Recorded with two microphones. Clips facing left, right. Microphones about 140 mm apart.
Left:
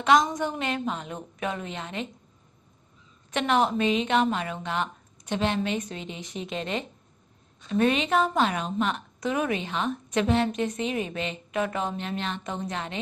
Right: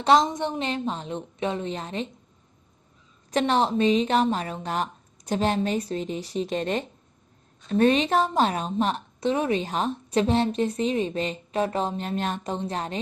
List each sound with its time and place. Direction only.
0.0 s a woman's voice: 30° right (ahead or behind)
3.3 s a woman's voice: 35° right (ahead or behind)